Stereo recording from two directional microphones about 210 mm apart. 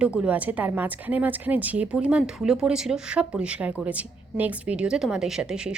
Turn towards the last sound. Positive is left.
turn(degrees=-5)  # may be behind; listen again after turning